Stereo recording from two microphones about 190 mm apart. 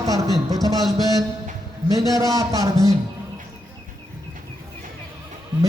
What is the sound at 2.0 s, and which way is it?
Speech, 15° right (ahead or behind).